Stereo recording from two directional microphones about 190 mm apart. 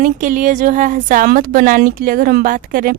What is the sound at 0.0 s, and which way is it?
Speech, 45° right (ahead or behind).